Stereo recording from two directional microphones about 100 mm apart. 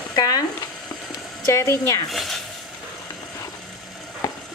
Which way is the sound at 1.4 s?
30° left (ahead or behind).